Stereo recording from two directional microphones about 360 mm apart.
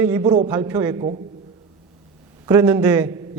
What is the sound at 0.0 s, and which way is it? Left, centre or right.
A man's voice, centre.